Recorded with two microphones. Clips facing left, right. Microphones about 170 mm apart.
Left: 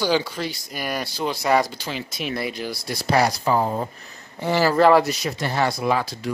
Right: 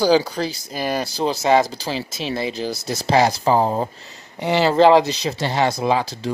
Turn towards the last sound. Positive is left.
turn(degrees=-20)  # may be behind; listen again after turning